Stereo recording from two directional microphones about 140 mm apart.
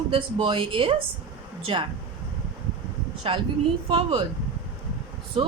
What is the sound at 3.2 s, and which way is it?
Speech, 40° right (ahead or behind).